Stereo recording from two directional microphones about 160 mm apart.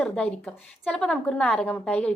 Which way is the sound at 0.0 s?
5° left (ahead or behind).